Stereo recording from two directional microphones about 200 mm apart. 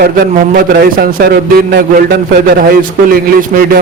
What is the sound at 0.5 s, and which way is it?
A man's voice, 50° right (ahead or behind).